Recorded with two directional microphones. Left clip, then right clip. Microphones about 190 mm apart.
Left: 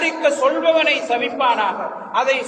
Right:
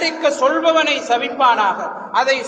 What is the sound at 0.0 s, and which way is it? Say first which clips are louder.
A man's voice: right 1 dB; 35° right (ahead or behind).